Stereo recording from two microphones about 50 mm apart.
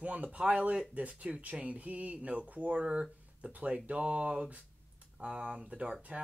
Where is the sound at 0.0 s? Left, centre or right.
Right.